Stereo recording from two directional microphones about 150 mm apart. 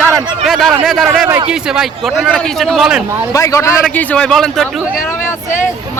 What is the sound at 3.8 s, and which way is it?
Speech, 10° left (ahead or behind).